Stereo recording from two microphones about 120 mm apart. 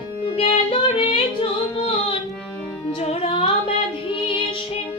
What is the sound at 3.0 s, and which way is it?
Music, 65° left (ahead or behind).